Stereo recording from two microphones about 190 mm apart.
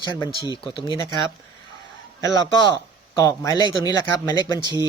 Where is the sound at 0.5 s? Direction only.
25° left (ahead or behind).